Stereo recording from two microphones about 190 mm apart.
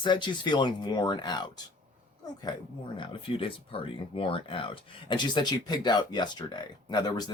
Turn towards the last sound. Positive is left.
turn(degrees=20)  # may be behind; listen again after turning